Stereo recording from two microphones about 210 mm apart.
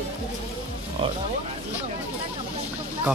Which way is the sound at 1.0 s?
25° right (ahead or behind).